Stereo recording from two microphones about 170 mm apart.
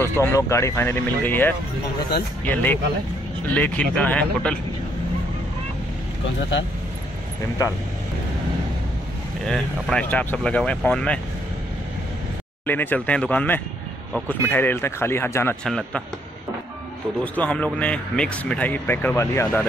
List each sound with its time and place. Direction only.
0.0 s speech: 15° left (ahead or behind)
9.5 s speech: 5° left (ahead or behind)
12.6 s speech: 10° left (ahead or behind)
15.6 s a man's voice: 5° left (ahead or behind)
17.2 s speech: 10° left (ahead or behind)